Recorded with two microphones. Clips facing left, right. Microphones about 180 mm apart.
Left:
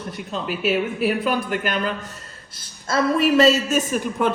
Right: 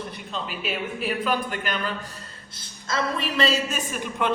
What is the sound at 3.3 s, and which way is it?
A man's voice, 40° left (ahead or behind).